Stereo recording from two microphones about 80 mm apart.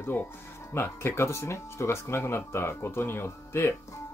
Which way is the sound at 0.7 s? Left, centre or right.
Left.